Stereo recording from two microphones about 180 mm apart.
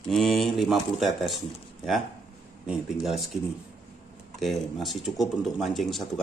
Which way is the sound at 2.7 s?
5° right (ahead or behind).